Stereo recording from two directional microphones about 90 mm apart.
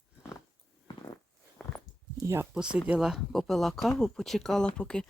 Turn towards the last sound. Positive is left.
turn(degrees=10)  # may be behind; listen again after turning